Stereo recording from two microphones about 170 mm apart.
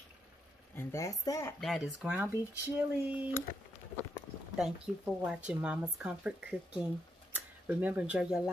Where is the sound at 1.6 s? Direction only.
Centre (ahead or behind).